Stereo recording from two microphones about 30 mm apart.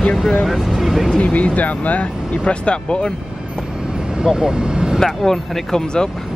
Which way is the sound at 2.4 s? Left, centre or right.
Left.